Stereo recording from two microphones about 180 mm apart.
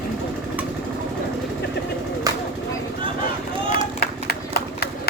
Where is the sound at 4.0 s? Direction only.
60° left (ahead or behind).